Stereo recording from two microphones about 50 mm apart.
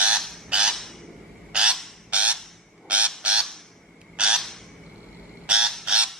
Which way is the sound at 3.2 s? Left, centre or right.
Right.